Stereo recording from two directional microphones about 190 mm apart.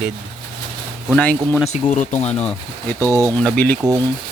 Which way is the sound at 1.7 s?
40° left (ahead or behind).